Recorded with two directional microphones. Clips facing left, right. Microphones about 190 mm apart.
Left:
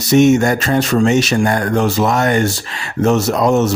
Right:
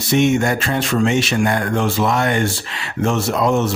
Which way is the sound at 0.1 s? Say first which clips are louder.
Left 5 dB; 40° left (ahead or behind).